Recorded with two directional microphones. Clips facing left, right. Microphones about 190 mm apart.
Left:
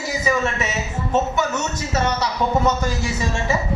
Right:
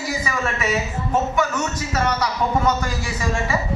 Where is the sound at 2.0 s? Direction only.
25° left (ahead or behind).